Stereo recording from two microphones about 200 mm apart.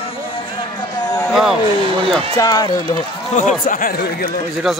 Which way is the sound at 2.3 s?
20° left (ahead or behind).